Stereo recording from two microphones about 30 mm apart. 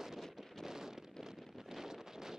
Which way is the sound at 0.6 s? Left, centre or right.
Centre.